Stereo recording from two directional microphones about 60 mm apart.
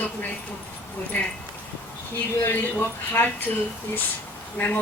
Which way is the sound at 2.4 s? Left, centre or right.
Left.